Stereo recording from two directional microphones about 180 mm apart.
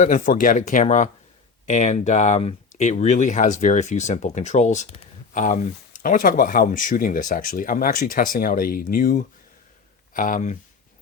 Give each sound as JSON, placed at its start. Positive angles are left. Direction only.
{"t": 0.0, "sound": "speech", "side_deg": 45}